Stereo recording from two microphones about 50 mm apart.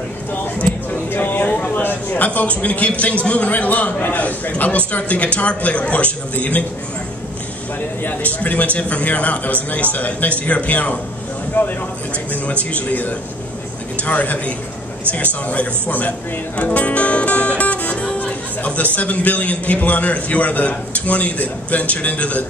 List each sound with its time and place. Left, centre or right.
1.1 s a sound: left
2.6 s speech: left
8.0 s a man's voice: left
12.7 s a man's voice: left